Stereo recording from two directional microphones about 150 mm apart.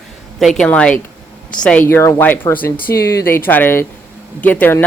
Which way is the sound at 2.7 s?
85° left.